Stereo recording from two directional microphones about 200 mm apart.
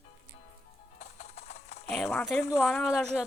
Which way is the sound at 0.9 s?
35° left (ahead or behind).